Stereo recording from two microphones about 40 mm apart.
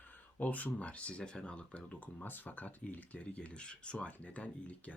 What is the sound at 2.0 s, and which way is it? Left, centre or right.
Speech, left.